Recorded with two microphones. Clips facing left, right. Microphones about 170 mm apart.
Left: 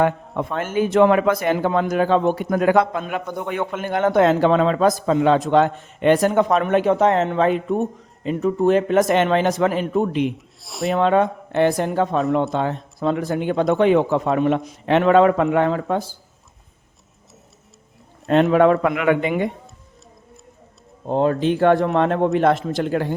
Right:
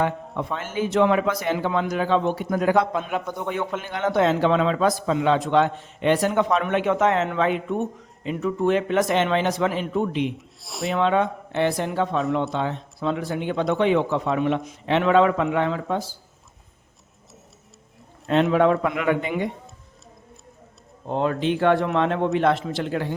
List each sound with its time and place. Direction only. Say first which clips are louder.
0.0 s a man's voice: left 5 dB; 55° left (ahead or behind)
3.8 s a man's voice: left 6 dB; 50° left (ahead or behind)
10.3 s speech: left 2 dB; centre (ahead or behind)
10.9 s a man's voice: left 4 dB; 45° left (ahead or behind)
18.3 s speech: left 4 dB; 50° left (ahead or behind)
21.1 s a man's voice: left 4 dB; 35° left (ahead or behind)